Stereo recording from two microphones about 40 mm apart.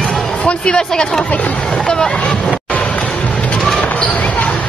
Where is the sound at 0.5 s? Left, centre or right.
Left.